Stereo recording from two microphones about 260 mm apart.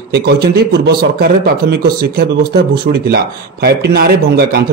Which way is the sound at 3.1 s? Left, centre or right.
Right.